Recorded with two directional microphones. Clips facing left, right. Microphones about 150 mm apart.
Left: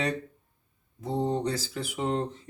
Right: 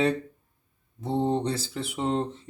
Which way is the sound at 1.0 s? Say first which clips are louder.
Right 3 dB; 25° right (ahead or behind).